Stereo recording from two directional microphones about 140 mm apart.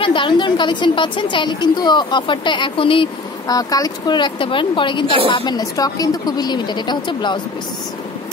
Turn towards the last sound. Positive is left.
turn(degrees=35)  # may be behind; listen again after turning